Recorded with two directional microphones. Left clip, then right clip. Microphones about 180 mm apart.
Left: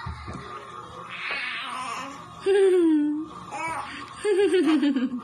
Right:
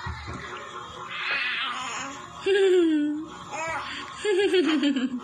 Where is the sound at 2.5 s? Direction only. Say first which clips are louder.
Left 1 dB; 30° left (ahead or behind).